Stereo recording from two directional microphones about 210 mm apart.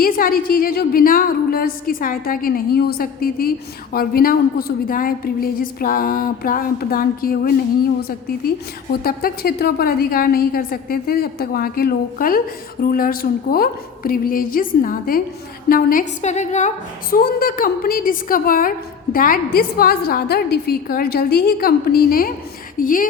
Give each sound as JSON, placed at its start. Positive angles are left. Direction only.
{"t": 0.0, "sound": "a woman's voice", "side_deg": 40}